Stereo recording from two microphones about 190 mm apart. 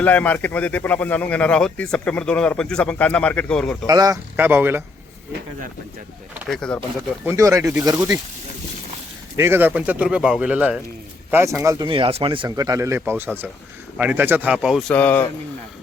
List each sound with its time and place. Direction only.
0.0 s speech: 10° left (ahead or behind)
3.8 s speech: 20° right (ahead or behind)
6.3 s speech: 10° right (ahead or behind)
9.3 s speech: 15° right (ahead or behind); by 15.3 s 10° left (ahead or behind)